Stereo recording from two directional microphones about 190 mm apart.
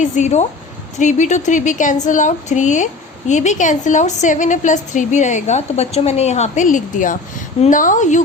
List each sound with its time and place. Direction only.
0.0 s a woman's voice: 35° left (ahead or behind)